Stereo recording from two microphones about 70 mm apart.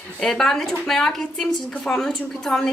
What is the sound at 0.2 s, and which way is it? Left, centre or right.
A woman's voice, centre.